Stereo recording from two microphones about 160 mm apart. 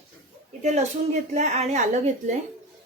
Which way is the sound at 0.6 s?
45° right (ahead or behind).